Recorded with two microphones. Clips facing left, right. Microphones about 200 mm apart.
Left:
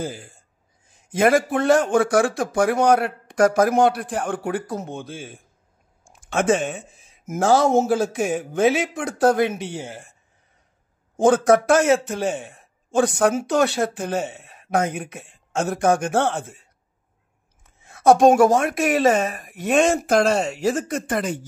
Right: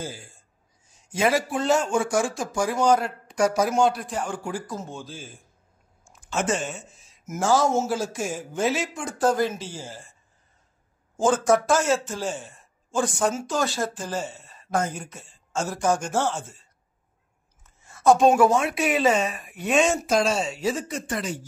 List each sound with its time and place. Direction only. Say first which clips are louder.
0.0 s a man's voice: left 6 dB; 55° left (ahead or behind)
6.0 s a man's voice: left 6 dB; 75° left (ahead or behind)
11.1 s a man's voice: left 5 dB; 60° left (ahead or behind)
17.8 s speech: left 4 dB; 60° left (ahead or behind)